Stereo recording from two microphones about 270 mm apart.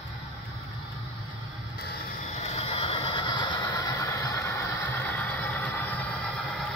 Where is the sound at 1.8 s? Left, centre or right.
Left; by 6.3 s centre.